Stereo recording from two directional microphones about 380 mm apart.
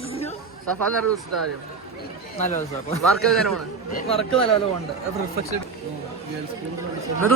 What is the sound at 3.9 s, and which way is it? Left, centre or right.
Speech, centre.